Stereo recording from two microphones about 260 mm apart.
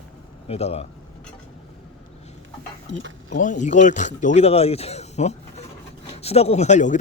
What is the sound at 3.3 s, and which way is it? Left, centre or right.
Speech, left.